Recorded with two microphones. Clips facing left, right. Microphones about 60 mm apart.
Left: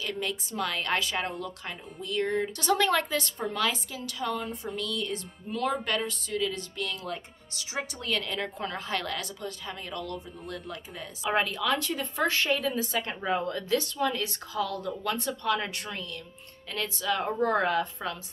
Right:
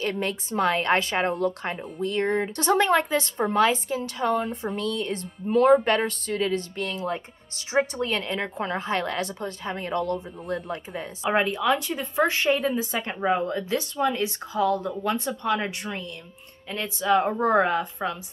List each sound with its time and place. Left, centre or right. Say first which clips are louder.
0.0 s speech: right 5 dB; right
1.4 s speech: right 11 dB; right
2.5 s speech: right 5 dB; right
10.5 s speech: right 10 dB; right; by 12.8 s centre
12.9 s speech: right 4 dB; right